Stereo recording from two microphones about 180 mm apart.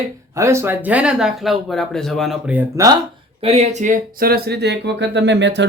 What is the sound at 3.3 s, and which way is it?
Speech, 35° right (ahead or behind).